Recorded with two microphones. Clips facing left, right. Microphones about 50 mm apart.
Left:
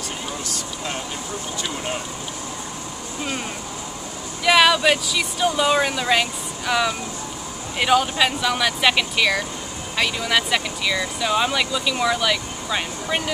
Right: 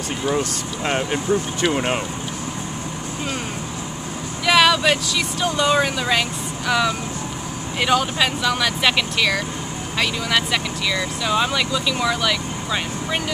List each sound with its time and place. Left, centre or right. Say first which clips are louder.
0.3 s speech: right 7 dB; right
4.5 s speech: even; centre